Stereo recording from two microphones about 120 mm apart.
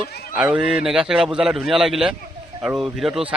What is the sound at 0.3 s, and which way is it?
A man's voice, 10° right (ahead or behind).